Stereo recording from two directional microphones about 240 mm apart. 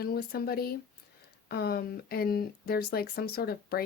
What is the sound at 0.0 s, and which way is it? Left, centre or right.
Speech, left.